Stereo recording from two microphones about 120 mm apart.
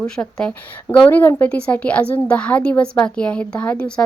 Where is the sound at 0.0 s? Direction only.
10° left (ahead or behind).